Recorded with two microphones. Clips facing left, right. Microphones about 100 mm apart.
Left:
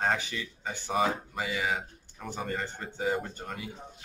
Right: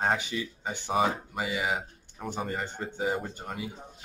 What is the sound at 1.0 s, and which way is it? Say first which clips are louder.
A man's voice: right 1 dB; 20° right (ahead or behind).